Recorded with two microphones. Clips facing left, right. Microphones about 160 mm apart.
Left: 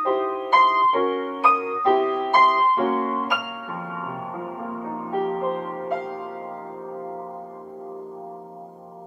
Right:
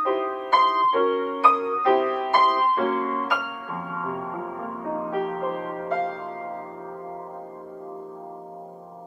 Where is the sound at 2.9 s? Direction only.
15° left (ahead or behind).